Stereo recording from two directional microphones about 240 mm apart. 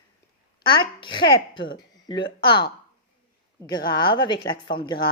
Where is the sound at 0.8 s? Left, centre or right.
Centre.